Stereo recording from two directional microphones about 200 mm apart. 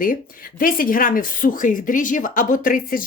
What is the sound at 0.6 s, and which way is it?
A woman's voice, 45° left (ahead or behind).